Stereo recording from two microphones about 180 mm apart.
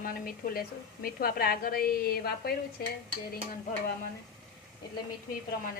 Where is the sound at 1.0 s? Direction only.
55° left (ahead or behind).